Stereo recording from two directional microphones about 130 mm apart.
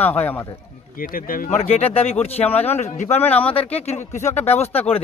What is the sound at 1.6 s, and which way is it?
Speech, 50° left (ahead or behind).